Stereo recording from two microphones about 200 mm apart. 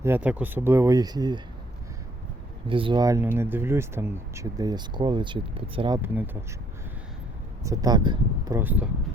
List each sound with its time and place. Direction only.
0.0 s speech: 10° right (ahead or behind)
2.6 s speech: 25° right (ahead or behind)
6.0 s speech: 10° right (ahead or behind)
7.6 s speech: 15° right (ahead or behind)